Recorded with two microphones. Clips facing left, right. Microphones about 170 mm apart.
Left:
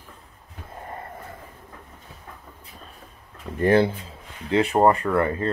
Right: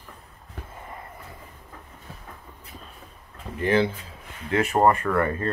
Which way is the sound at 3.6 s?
40° left (ahead or behind).